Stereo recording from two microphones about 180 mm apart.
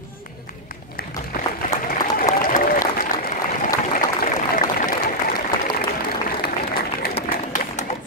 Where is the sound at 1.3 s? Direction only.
55° left (ahead or behind).